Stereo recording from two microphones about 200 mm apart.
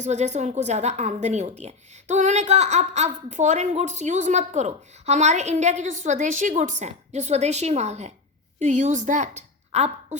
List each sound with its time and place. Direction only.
0.0 s a woman's voice: 35° right (ahead or behind)